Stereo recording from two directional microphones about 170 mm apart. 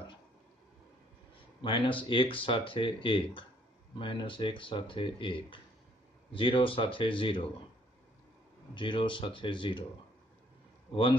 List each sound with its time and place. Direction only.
1.3 s speech: 30° left (ahead or behind)
8.7 s speech: 30° left (ahead or behind)